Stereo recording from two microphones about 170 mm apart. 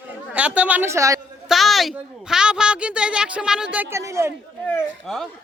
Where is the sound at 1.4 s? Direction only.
Centre (ahead or behind); by 4.3 s 15° right (ahead or behind).